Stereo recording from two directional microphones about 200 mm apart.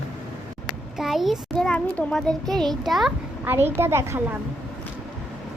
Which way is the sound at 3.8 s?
10° right (ahead or behind).